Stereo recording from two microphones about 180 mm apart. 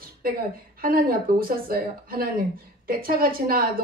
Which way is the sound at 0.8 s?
55° right (ahead or behind).